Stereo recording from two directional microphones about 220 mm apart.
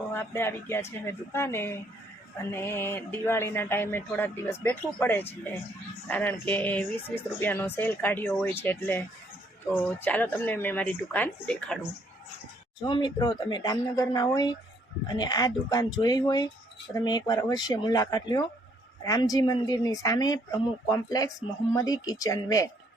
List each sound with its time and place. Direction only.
0.1 s speech: 10° left (ahead or behind)
12.8 s speech: 20° left (ahead or behind)